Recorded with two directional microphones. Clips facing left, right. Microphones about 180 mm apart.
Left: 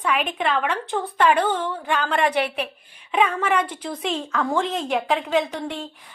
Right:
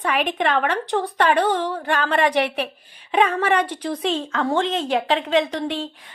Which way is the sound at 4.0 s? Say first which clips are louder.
Right 1 dB; 30° right (ahead or behind).